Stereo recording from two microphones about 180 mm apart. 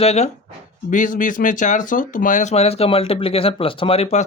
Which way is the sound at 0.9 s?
45° left (ahead or behind).